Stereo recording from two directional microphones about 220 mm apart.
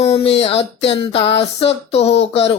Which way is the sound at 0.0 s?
25° left (ahead or behind).